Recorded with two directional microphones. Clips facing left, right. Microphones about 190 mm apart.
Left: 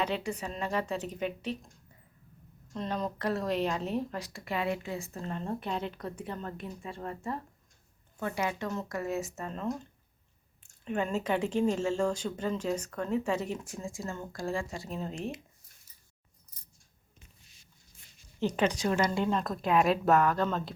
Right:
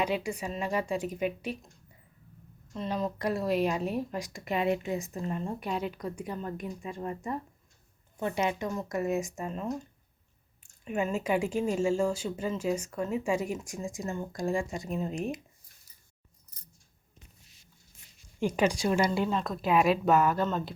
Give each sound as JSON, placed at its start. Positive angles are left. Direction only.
{"t": 0.0, "sound": "speech", "side_deg": -10}
{"t": 2.7, "sound": "speech", "side_deg": 0}
{"t": 18.3, "sound": "speech", "side_deg": -10}